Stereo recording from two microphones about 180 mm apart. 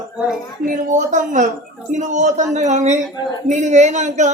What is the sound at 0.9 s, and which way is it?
Speech, 45° right (ahead or behind).